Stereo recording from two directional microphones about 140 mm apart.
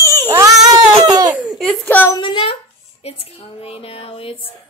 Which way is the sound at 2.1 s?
35° left (ahead or behind).